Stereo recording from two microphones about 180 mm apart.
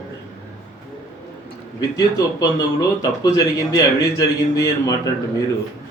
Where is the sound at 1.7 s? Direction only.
20° left (ahead or behind).